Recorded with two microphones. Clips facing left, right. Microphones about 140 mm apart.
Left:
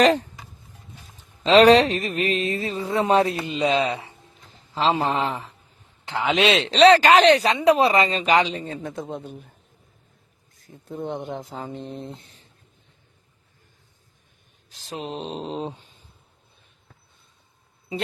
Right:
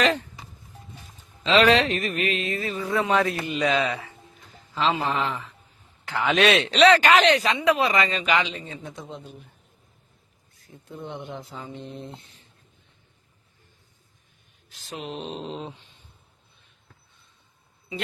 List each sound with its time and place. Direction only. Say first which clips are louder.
0.0 s speech: left 6 dB; 40° left (ahead or behind)
1.5 s a man's voice: left 5 dB; 40° left (ahead or behind)
6.1 s speech: even; 20° left (ahead or behind); by 9.5 s 50° left (ahead or behind)
10.6 s speech: left 6 dB; 40° left (ahead or behind)
12.2 s a sound: left 2 dB; 40° left (ahead or behind)
14.7 s speech: left 3 dB; 35° left (ahead or behind)